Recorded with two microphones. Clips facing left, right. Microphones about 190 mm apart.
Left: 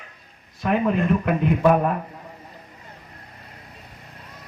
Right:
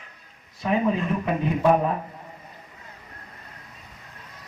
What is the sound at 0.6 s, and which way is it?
Speech, 60° left (ahead or behind).